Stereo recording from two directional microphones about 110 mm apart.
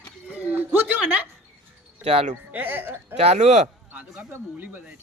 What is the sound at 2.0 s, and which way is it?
Speech, 70° right (ahead or behind).